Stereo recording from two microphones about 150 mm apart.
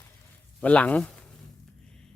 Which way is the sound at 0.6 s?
10° left (ahead or behind).